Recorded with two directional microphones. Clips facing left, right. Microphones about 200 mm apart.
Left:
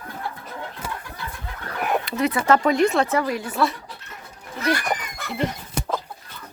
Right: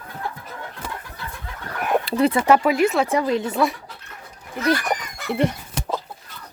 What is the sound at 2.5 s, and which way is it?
Speech, 5° right (ahead or behind).